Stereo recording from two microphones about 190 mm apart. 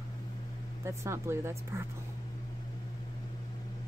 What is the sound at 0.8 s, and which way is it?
Speech, 15° right (ahead or behind).